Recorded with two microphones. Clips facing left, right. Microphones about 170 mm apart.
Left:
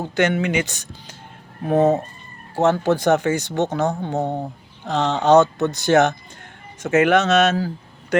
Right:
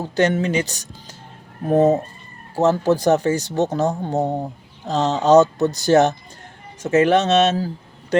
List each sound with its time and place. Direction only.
0.0 s speech: 35° right (ahead or behind)